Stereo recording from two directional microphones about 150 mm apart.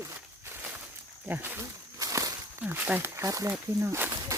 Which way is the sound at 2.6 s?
10° right (ahead or behind).